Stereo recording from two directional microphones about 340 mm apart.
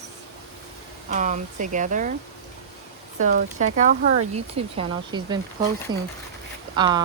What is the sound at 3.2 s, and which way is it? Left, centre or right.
Speech, right.